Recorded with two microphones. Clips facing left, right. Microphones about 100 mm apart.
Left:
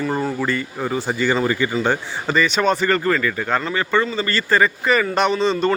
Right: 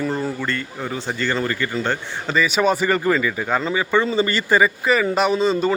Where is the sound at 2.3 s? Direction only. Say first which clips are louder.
Even; 5° right (ahead or behind).